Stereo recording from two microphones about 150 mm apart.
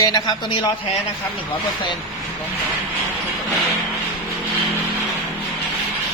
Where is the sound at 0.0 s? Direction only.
25° left (ahead or behind).